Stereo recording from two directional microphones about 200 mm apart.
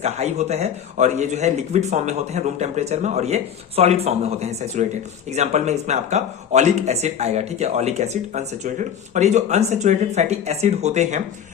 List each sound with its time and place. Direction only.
0.0 s speech: 35° right (ahead or behind)